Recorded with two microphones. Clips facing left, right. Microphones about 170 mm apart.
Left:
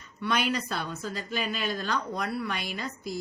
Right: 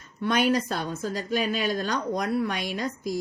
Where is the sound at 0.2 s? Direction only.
45° right (ahead or behind).